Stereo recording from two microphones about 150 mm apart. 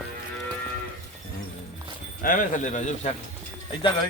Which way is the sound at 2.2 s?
60° left (ahead or behind).